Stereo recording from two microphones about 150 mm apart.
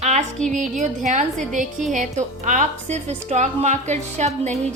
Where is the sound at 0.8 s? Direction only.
50° right (ahead or behind).